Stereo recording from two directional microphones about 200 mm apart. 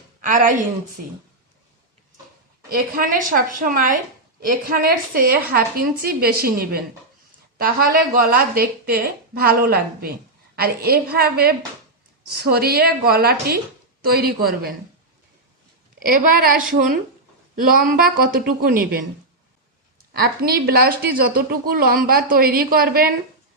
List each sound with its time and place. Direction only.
0.2 s a woman's voice: 40° right (ahead or behind)
2.6 s a woman's voice: 45° right (ahead or behind)
16.0 s a woman's voice: 45° right (ahead or behind)
20.1 s a woman's voice: 50° right (ahead or behind)